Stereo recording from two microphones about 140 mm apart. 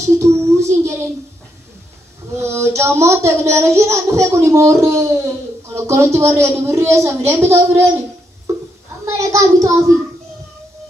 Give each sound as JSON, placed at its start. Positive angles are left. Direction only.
{"t": 0.2, "sound": "a sound", "side_deg": -20}
{"t": 2.3, "sound": "child singing", "side_deg": -20}
{"t": 9.0, "sound": "child singing", "side_deg": -20}